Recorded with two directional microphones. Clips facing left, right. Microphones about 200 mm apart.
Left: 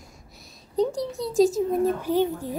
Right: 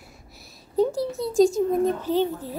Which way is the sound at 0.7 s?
5° right (ahead or behind).